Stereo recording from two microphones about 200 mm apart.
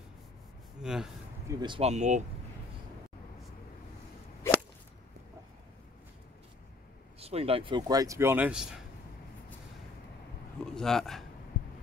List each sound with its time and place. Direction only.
0.8 s speech: 5° right (ahead or behind)
1.5 s speech: 25° right (ahead or behind)
7.2 s speech: 30° right (ahead or behind); by 8.8 s 5° right (ahead or behind)
10.6 s speech: centre (ahead or behind)